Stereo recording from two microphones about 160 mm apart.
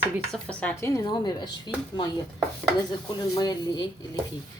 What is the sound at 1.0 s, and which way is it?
Speech, 25° left (ahead or behind).